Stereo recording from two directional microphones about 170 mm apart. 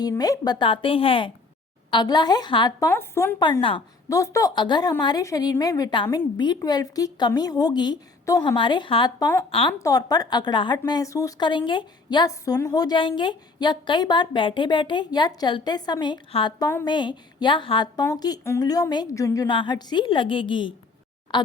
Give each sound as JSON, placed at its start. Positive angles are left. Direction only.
{"t": 0.0, "sound": "a woman's voice", "side_deg": 20}
{"t": 2.9, "sound": "a woman's voice", "side_deg": 15}
{"t": 3.6, "sound": "a woman's voice", "side_deg": 30}
{"t": 4.1, "sound": "a woman's voice", "side_deg": 20}
{"t": 9.5, "sound": "a woman's voice", "side_deg": 35}
{"t": 9.7, "sound": "a woman's voice", "side_deg": 20}